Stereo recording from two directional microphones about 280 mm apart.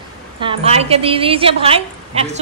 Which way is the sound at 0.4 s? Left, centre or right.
Centre.